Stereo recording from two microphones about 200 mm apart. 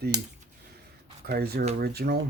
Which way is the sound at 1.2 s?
50° right (ahead or behind).